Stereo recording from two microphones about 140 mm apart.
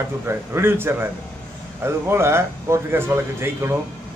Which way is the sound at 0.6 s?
15° right (ahead or behind).